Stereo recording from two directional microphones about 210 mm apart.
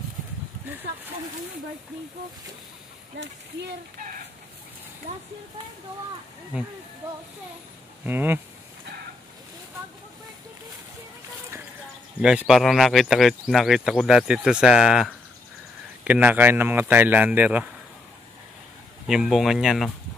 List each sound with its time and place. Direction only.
3.1 s speech: 55° right (ahead or behind)
6.5 s speech: 5° right (ahead or behind)
8.0 s speech: 10° right (ahead or behind)
12.2 s speech: 5° right (ahead or behind)
19.0 s speech: centre (ahead or behind)